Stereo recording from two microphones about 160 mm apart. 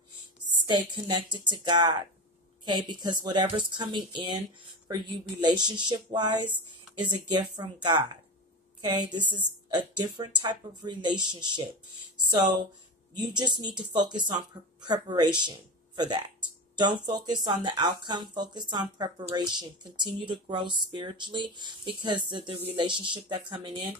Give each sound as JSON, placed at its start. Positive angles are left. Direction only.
{"t": 0.7, "sound": "speech", "side_deg": -25}
{"t": 16.7, "sound": "speech", "side_deg": -30}